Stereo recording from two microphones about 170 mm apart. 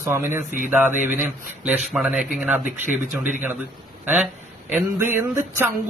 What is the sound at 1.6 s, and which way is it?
A man's voice, 10° right (ahead or behind).